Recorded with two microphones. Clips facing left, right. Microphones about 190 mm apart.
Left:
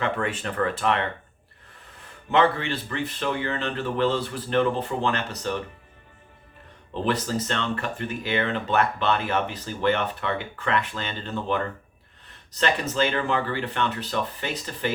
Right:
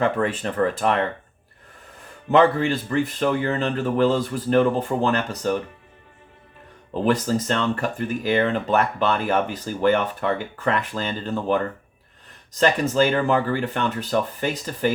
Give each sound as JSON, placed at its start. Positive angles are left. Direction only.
{"t": 0.0, "sound": "speech", "side_deg": -35}
{"t": 2.3, "sound": "speech", "side_deg": -40}
{"t": 6.9, "sound": "speech", "side_deg": -40}